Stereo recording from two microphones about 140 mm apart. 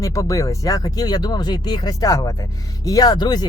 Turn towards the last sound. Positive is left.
turn(degrees=30)  # may be behind; listen again after turning